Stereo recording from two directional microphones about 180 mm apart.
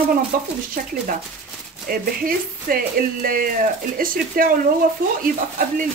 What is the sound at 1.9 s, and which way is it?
Speech, 50° right (ahead or behind).